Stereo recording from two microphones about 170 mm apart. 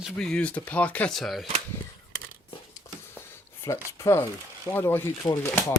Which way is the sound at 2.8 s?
25° left (ahead or behind).